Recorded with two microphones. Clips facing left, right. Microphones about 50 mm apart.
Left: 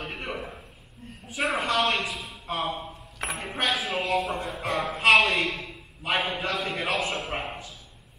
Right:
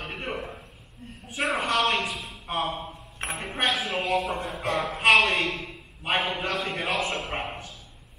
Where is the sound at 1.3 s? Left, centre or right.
Centre.